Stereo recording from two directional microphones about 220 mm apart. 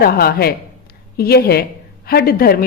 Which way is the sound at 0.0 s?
45° left (ahead or behind).